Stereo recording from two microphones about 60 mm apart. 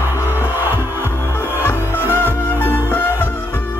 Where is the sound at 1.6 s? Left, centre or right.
Left.